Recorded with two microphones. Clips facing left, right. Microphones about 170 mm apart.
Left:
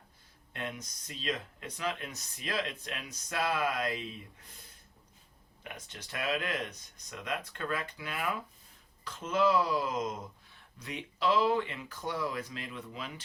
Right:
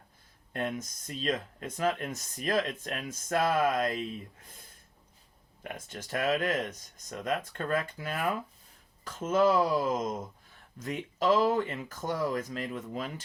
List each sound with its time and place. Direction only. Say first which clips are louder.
0.5 s speech: right 7 dB; 45° right (ahead or behind)
5.6 s speech: right 6 dB; 45° right (ahead or behind)